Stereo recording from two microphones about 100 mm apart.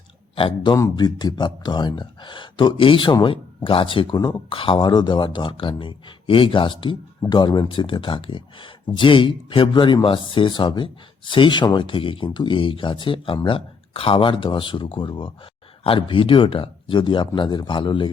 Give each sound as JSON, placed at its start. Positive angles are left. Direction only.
{"t": 0.3, "sound": "speech", "side_deg": 60}
{"t": 0.9, "sound": "speech", "side_deg": 45}